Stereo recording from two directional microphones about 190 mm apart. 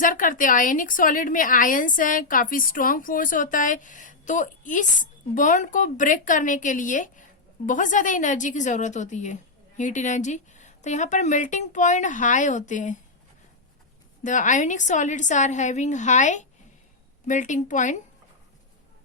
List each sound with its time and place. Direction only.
0.0 s a woman's voice: 45° left (ahead or behind)
14.3 s a woman's voice: 40° left (ahead or behind)